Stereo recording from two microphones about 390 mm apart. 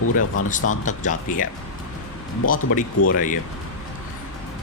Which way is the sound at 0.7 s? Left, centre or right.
Centre.